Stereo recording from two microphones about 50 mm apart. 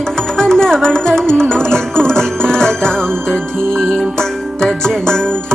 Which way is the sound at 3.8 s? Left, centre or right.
Right.